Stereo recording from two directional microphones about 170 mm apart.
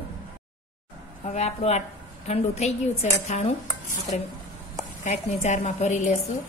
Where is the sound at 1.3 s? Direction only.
40° left (ahead or behind).